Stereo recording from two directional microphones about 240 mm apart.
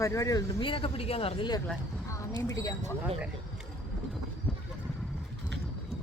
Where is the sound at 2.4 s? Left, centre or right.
Centre.